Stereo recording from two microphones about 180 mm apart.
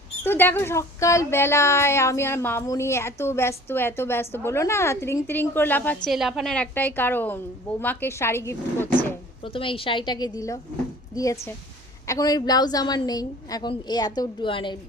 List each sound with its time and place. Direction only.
0.3 s speech: 10° left (ahead or behind)
6.1 s speech: centre (ahead or behind)
9.4 s a woman's voice: 30° left (ahead or behind)